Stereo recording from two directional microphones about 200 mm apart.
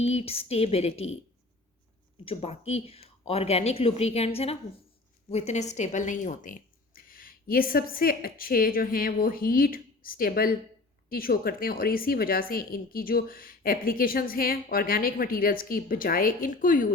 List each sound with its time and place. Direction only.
0.0 s speech: 30° left (ahead or behind)
2.2 s a woman's voice: 30° left (ahead or behind)